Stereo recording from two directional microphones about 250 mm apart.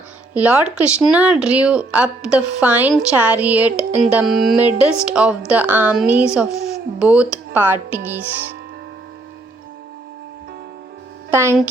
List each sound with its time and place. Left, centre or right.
0.3 s a woman's voice: centre
11.3 s speech: centre